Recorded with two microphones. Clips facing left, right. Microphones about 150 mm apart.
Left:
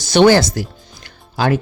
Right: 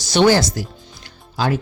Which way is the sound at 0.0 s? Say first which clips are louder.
Left 4 dB; 60° left (ahead or behind).